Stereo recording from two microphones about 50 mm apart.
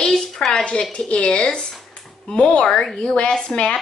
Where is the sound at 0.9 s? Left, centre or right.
Left.